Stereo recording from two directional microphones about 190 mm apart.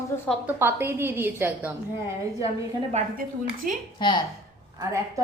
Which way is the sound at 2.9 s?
35° right (ahead or behind).